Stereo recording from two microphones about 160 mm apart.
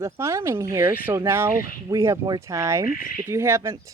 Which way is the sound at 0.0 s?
20° right (ahead or behind).